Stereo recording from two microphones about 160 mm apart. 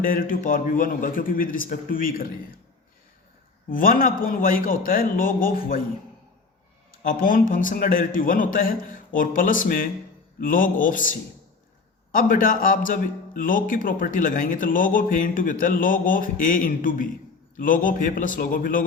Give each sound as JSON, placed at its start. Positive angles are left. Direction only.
{"t": 0.0, "sound": "a man's voice", "side_deg": 60}
{"t": 3.7, "sound": "a man's voice", "side_deg": 60}
{"t": 6.9, "sound": "a man's voice", "side_deg": 55}
{"t": 12.1, "sound": "a man's voice", "side_deg": 60}